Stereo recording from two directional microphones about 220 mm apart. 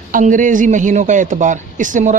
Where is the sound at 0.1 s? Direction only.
35° right (ahead or behind).